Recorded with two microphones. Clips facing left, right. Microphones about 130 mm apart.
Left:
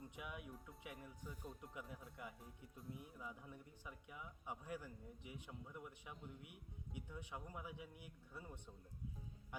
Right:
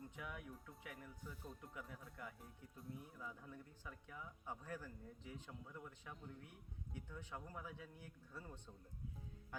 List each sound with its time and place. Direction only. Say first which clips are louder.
0.2 s a man's voice: even; 20° left (ahead or behind)